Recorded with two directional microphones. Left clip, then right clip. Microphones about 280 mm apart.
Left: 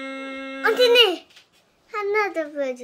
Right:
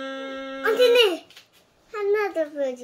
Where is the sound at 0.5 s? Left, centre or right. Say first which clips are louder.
Left 1 dB; centre.